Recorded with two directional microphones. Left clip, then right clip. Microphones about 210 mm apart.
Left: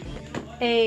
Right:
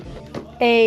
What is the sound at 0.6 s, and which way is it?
Speech, 55° right (ahead or behind).